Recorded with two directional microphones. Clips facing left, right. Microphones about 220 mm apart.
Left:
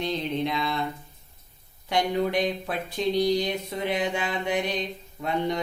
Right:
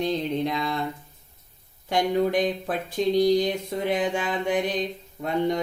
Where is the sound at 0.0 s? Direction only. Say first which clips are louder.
Right 2 dB; 45° right (ahead or behind).